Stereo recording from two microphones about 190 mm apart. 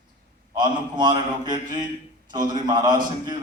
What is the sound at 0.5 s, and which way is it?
Speech, 25° right (ahead or behind).